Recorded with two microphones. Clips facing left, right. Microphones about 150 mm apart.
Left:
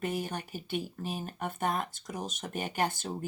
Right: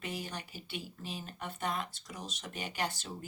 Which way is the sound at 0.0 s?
50° left (ahead or behind).